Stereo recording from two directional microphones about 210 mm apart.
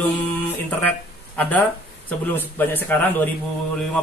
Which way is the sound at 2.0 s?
10° left (ahead or behind).